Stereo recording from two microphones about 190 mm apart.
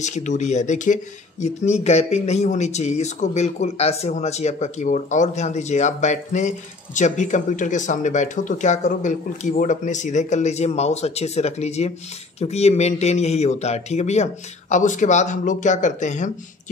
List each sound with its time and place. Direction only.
0.0 s speech: 40° left (ahead or behind)